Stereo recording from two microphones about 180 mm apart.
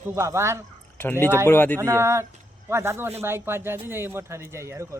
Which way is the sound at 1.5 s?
10° left (ahead or behind).